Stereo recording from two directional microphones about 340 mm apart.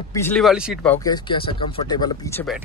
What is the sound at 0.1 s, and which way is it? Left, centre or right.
Speech, centre.